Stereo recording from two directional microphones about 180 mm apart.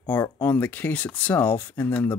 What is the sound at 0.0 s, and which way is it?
Speech, 10° left (ahead or behind).